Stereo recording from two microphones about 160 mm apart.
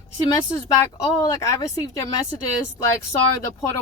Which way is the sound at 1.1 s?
20° left (ahead or behind).